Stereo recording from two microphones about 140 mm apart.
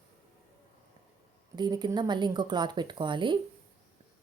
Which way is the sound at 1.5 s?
30° right (ahead or behind).